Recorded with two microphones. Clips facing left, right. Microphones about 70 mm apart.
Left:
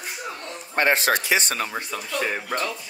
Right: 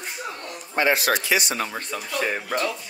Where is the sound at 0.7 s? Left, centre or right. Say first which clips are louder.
Even; left.